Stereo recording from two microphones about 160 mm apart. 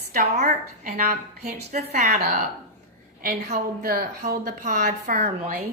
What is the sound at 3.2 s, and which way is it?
A woman's voice, 65° right (ahead or behind).